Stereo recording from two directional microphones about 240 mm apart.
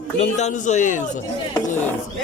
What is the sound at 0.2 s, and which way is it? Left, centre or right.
Speech, left.